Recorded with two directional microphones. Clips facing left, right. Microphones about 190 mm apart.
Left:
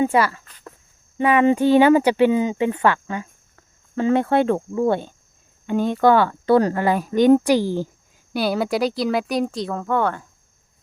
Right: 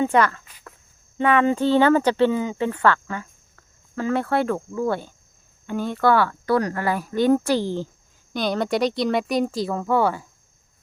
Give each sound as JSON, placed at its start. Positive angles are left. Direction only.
{"t": 0.0, "sound": "speech", "side_deg": 10}